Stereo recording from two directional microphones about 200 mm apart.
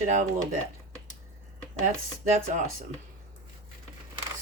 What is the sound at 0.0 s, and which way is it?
Speech, 40° right (ahead or behind).